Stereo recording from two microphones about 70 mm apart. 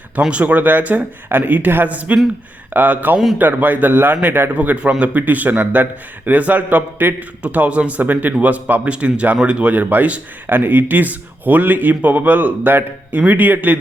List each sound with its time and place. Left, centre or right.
0.2 s a man's voice: centre